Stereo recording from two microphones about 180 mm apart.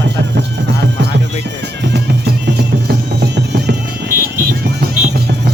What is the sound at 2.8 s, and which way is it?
Music, 65° right (ahead or behind).